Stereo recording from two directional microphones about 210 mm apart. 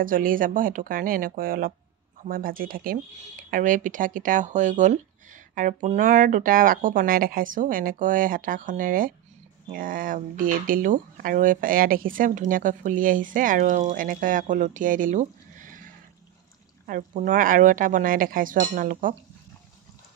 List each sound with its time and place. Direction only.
0.0 s speech: 40° right (ahead or behind)